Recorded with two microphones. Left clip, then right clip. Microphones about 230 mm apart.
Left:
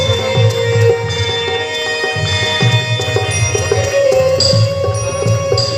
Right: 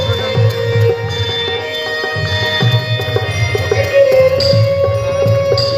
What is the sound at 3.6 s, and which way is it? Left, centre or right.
Music, right.